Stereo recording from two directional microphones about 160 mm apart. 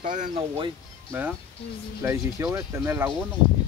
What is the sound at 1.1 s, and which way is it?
Speech, 10° right (ahead or behind).